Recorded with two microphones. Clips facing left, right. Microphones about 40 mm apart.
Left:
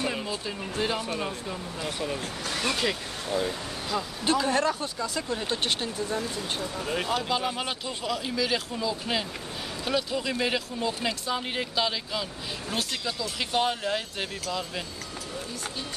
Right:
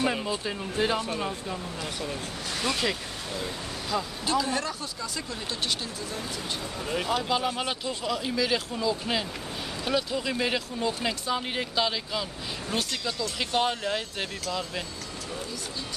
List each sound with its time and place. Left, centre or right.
0.0 s speech: centre
0.8 s speech: centre
2.5 s speech: left
3.9 s speech: centre
4.5 s speech: centre
5.5 s speech: left
6.9 s speech: centre